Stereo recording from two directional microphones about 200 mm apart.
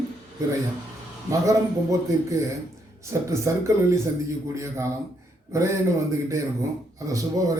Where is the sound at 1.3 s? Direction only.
15° right (ahead or behind).